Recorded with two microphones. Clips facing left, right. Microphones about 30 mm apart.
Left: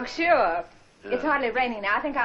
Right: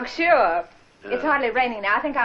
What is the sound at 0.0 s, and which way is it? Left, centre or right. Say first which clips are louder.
Speech: right 3 dB; centre.